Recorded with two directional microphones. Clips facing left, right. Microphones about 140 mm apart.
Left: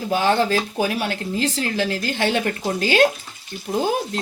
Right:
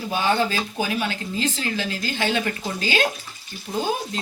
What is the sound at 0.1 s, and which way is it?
Speech, 80° left.